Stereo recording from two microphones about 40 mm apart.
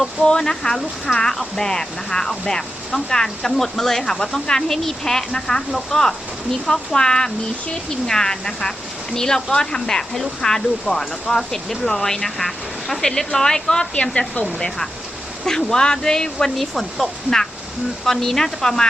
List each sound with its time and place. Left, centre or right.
0.2 s speech: centre
15.4 s speech: centre